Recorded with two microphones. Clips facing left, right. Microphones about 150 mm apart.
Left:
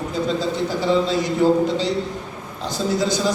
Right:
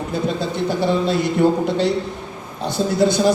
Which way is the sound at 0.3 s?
60° right (ahead or behind).